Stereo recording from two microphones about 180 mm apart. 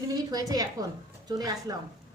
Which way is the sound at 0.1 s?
20° right (ahead or behind).